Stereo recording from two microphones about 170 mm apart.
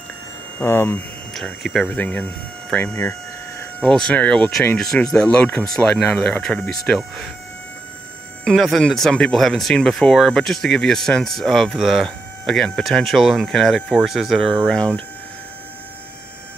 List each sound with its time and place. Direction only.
0.6 s hum: 15° left (ahead or behind)
1.3 s speech: centre (ahead or behind)
3.0 s a sound: 20° left (ahead or behind)
3.8 s speech: 5° left (ahead or behind)
8.5 s speech: centre (ahead or behind)